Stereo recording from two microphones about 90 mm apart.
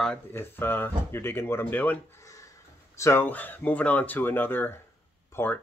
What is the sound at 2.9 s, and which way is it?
Speech, 30° left (ahead or behind).